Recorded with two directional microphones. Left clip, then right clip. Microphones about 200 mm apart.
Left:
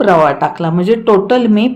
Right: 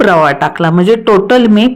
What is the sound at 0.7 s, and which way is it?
A woman's voice, 15° right (ahead or behind).